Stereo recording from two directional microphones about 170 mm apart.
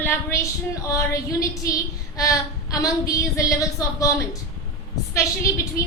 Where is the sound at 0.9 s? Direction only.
20° left (ahead or behind).